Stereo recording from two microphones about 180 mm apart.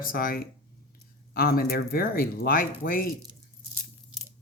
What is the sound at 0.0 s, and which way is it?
Speech, 55° left (ahead or behind).